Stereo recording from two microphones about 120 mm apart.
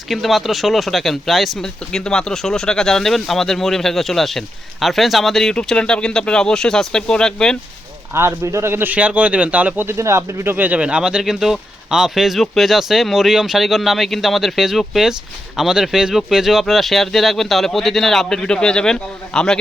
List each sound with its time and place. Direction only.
0.1 s speech: centre (ahead or behind)
8.1 s speech: 20° right (ahead or behind); by 19.5 s 5° left (ahead or behind)